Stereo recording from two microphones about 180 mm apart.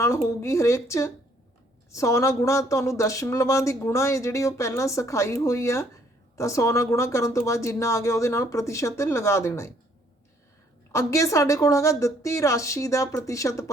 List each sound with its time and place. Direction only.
0.3 s speech: 15° left (ahead or behind)
10.9 s speech: 15° left (ahead or behind)